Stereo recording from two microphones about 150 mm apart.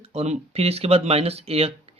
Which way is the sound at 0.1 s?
45° right (ahead or behind).